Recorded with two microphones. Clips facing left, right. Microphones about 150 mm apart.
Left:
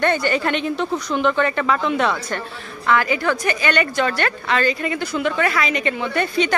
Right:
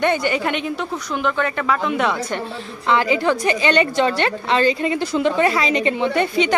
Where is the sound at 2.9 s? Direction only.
25° right (ahead or behind).